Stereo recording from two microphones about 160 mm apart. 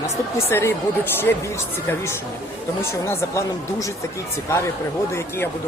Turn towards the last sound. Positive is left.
turn(degrees=15)  # may be behind; listen again after turning